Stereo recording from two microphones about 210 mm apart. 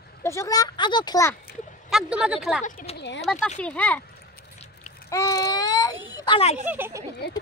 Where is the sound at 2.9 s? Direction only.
55° left (ahead or behind).